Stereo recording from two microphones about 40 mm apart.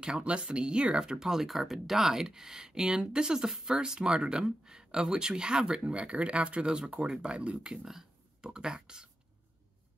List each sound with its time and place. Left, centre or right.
0.0 s speech: right
1.2 s speech: centre; by 7.5 s right
7.5 s speech: centre
8.4 s speech: centre